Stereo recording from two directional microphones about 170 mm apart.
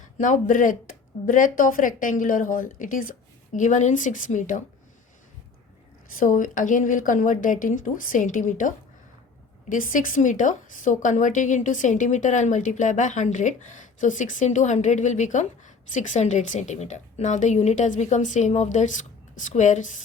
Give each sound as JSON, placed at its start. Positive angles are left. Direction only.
{"t": 0.2, "sound": "a woman's voice", "side_deg": 50}
{"t": 6.1, "sound": "a woman's voice", "side_deg": 50}